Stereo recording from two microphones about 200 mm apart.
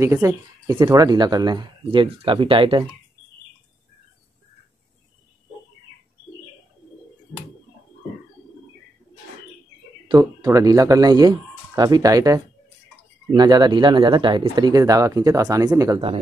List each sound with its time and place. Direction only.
0.0 s speech: 15° right (ahead or behind)
10.0 s speech: 20° right (ahead or behind)